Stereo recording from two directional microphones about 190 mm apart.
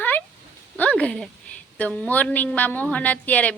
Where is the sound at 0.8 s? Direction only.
5° left (ahead or behind).